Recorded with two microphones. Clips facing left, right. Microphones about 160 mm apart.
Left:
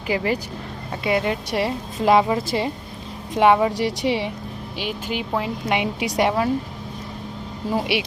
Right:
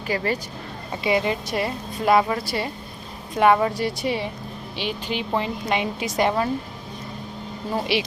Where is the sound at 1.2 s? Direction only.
65° left (ahead or behind).